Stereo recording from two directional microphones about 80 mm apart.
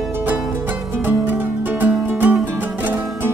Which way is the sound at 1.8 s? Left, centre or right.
Right.